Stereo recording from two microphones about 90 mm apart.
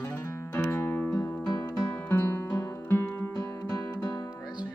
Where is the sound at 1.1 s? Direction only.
35° left (ahead or behind).